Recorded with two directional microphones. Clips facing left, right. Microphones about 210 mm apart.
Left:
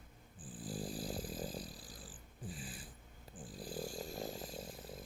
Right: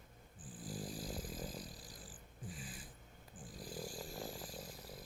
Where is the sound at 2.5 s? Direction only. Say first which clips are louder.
Left 2 dB; 30° left (ahead or behind).